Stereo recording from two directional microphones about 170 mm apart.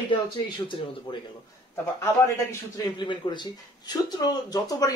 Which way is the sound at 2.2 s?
15° left (ahead or behind).